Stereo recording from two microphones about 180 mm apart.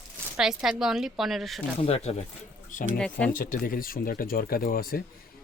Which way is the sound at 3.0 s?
5° left (ahead or behind).